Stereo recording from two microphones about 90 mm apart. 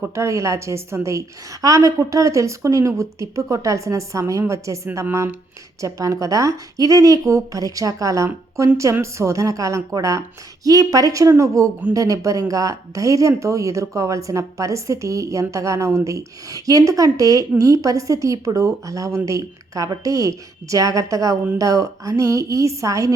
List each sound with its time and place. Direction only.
0.1 s a woman's voice: 35° right (ahead or behind)
5.8 s a woman's voice: 35° right (ahead or behind)